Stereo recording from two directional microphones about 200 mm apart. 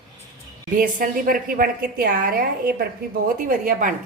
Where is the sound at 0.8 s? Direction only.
40° right (ahead or behind).